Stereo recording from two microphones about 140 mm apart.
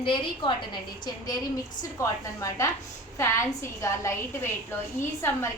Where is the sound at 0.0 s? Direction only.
35° left (ahead or behind).